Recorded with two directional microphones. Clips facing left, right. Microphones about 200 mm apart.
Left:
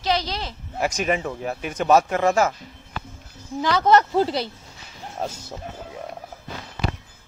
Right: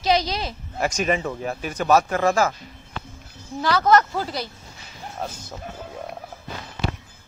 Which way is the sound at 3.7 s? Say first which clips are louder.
Left 1 dB; 25° left (ahead or behind).